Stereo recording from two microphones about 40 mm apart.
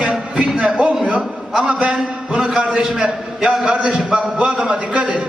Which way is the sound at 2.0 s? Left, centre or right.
Centre.